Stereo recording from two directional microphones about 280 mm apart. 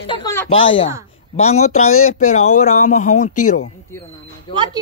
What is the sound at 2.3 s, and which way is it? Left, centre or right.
Speech, left.